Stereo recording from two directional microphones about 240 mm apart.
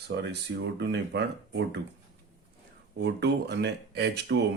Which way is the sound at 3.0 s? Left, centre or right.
Right.